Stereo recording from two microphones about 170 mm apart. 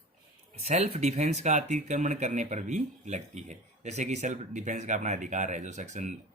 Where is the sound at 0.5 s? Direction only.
40° right (ahead or behind).